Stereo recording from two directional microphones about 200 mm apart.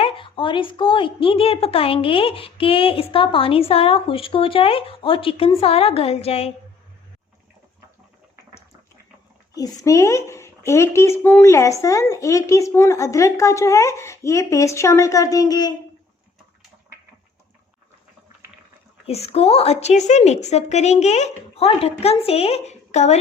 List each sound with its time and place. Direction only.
0.0 s a woman's voice: 25° left (ahead or behind)
9.6 s speech: 20° left (ahead or behind)
19.0 s a woman's voice: 30° left (ahead or behind)